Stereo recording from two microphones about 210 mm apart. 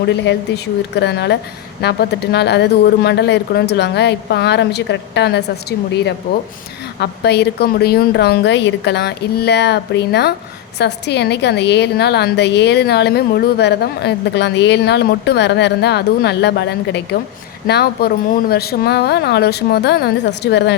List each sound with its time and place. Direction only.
0.0 s a woman's voice: 55° left (ahead or behind)